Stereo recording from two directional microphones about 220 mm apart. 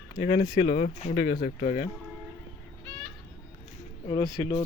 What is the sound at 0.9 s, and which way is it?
Speech, 30° left (ahead or behind).